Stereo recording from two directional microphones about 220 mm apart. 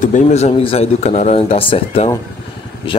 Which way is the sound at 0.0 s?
35° left (ahead or behind).